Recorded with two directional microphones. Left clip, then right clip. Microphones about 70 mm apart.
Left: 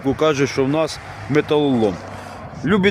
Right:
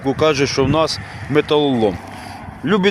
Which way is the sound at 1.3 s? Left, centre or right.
Left.